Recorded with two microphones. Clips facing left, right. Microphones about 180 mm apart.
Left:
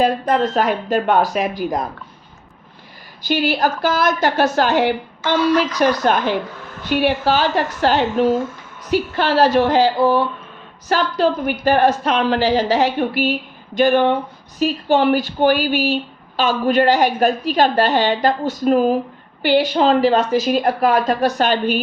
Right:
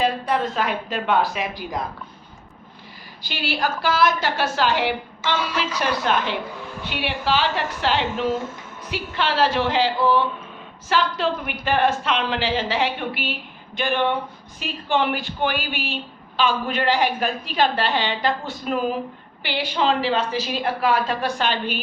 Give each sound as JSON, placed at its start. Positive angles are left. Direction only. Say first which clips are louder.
{"t": 0.0, "sound": "a woman's voice", "louder": "left 5 dB", "side_deg": 45}
{"t": 3.2, "sound": "a woman's voice", "louder": "left 8 dB", "side_deg": 45}
{"t": 5.4, "sound": "a woman's voice", "louder": "left 9 dB", "side_deg": -10}
{"t": 5.8, "sound": "a woman's voice", "louder": "left 6 dB", "side_deg": 45}
{"t": 6.6, "sound": "a sound", "louder": "right 1 dB", "side_deg": -15}
{"t": 6.8, "sound": "a woman's voice", "louder": "left 9 dB", "side_deg": 40}